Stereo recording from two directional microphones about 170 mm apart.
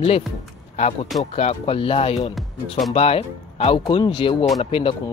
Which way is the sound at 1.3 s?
35° left (ahead or behind).